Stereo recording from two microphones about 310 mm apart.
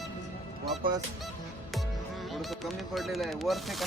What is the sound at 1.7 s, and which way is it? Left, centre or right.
Speech, centre.